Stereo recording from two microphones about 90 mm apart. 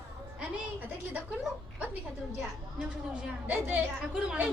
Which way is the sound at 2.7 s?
15° right (ahead or behind).